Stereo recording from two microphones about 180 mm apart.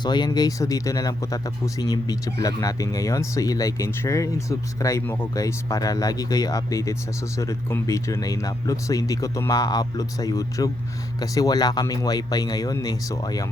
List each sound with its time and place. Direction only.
0.0 s speech: 25° left (ahead or behind)